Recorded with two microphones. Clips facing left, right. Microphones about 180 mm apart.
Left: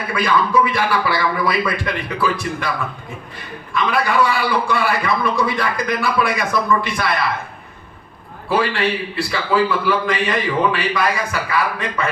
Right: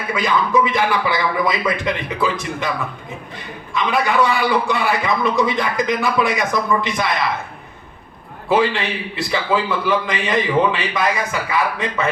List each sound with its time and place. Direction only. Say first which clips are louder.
0.1 s a man's voice: even; 20° right (ahead or behind)
3.8 s a man's voice: even; 20° right (ahead or behind)
8.4 s a man's voice: right 1 dB; 20° right (ahead or behind)